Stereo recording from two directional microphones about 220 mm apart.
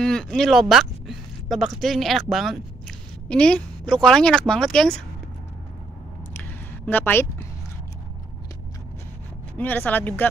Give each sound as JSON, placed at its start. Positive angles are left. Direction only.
{"t": 0.0, "sound": "speech", "side_deg": 5}
{"t": 6.9, "sound": "speech", "side_deg": 10}
{"t": 9.6, "sound": "speech", "side_deg": 10}